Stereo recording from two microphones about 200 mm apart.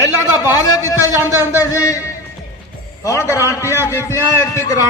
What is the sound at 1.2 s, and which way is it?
Speech, 10° right (ahead or behind).